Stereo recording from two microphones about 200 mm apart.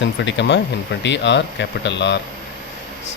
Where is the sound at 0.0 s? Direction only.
60° left (ahead or behind).